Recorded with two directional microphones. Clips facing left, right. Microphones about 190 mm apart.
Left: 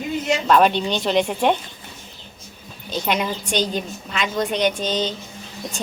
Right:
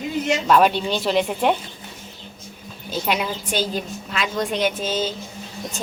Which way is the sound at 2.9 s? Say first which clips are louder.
Left 1 dB; 5° right (ahead or behind).